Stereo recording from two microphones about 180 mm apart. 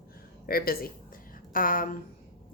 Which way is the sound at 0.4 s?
55° left (ahead or behind).